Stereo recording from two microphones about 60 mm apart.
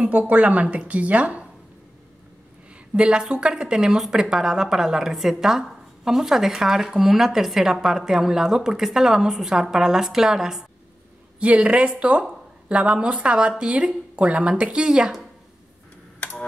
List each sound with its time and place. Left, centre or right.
0.3 s speech: right
2.9 s speech: centre
16.2 s computer keyboard: left